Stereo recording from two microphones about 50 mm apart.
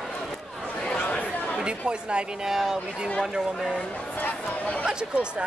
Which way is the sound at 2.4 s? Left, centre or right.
Centre.